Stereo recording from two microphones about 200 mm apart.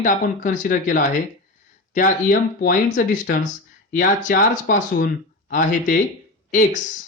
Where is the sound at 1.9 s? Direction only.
45° left (ahead or behind).